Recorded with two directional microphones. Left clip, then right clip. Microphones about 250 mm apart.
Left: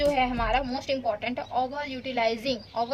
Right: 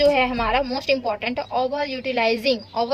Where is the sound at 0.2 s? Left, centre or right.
Right.